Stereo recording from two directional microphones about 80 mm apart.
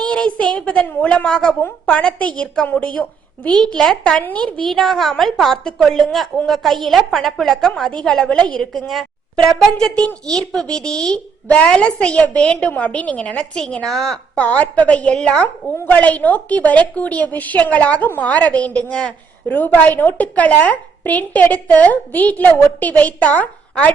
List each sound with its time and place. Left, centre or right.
0.0 s a woman's voice: centre
3.6 s a woman's voice: centre
4.7 s a woman's voice: centre
9.7 s a woman's voice: centre
14.3 s a woman's voice: centre